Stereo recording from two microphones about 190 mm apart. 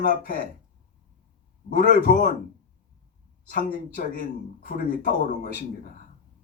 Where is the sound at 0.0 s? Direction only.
45° left (ahead or behind).